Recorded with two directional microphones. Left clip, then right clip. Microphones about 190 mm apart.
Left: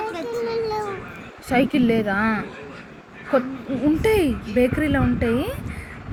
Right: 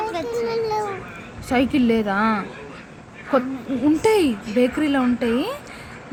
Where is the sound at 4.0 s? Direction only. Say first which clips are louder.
Right 2 dB; 10° right (ahead or behind).